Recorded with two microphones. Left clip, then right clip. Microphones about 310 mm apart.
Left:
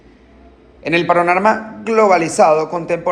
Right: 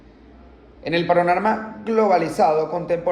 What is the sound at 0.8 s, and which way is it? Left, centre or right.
Speech, left.